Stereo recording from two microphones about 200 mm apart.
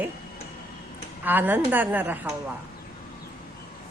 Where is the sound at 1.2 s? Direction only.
10° right (ahead or behind).